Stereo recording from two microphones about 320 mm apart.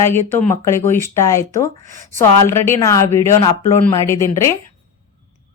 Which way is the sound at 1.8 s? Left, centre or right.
Right.